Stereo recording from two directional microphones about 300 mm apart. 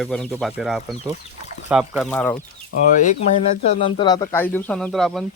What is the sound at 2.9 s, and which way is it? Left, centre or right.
Speech, left.